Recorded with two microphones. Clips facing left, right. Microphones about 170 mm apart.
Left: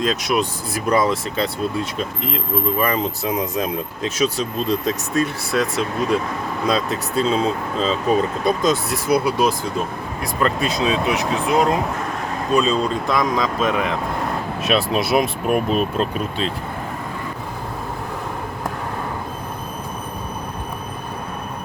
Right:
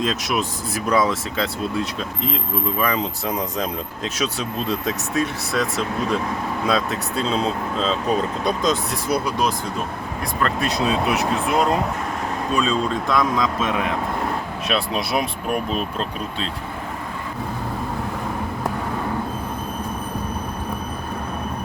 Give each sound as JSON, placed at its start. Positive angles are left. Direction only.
{"t": 0.0, "sound": "speech", "side_deg": 0}
{"t": 12.5, "sound": "speech", "side_deg": 0}